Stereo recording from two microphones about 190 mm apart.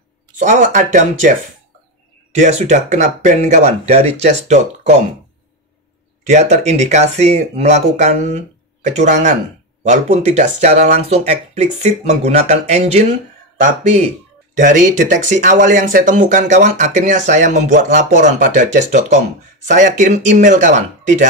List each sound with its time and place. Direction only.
0.4 s speech: 40° right (ahead or behind)
2.3 s speech: 40° right (ahead or behind)
6.2 s speech: 35° right (ahead or behind)